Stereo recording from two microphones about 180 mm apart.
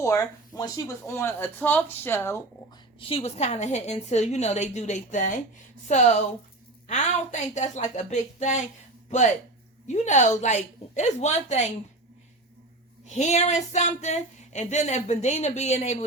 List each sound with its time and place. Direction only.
0.0 s speech: 20° left (ahead or behind)
3.0 s speech: 30° left (ahead or behind)
6.8 s speech: 40° left (ahead or behind)
9.8 s speech: 40° left (ahead or behind)
13.1 s speech: 40° left (ahead or behind)